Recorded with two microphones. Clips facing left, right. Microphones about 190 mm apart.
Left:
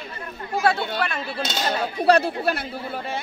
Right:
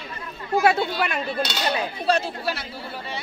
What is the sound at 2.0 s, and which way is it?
Speech, 60° left (ahead or behind).